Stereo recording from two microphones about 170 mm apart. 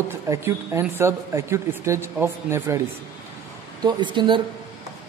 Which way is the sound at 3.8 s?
25° right (ahead or behind).